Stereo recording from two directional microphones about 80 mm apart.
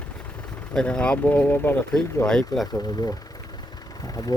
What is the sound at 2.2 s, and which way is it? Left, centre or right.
Speech, centre.